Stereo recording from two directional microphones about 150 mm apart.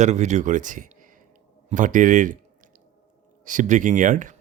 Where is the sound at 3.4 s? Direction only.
60° right (ahead or behind).